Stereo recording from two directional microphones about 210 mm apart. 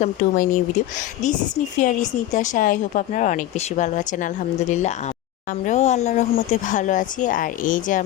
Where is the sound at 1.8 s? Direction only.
35° left (ahead or behind).